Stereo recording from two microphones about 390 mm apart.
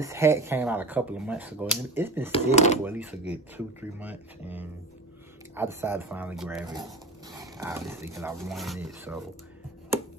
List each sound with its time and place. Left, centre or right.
0.0 s speech: centre
2.3 s speech: centre
2.8 s speech: centre